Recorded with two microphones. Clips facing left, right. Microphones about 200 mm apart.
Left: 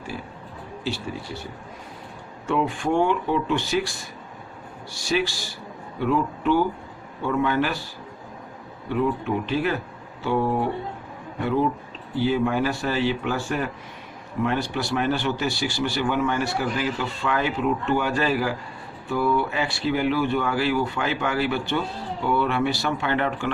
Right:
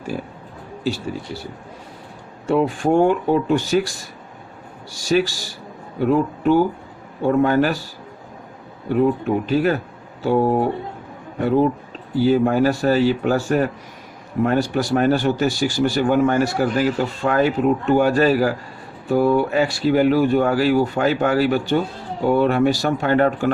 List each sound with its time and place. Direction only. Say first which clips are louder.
2.5 s speech: right 6 dB; 40° right (ahead or behind)
8.9 s speech: right 6 dB; 45° right (ahead or behind)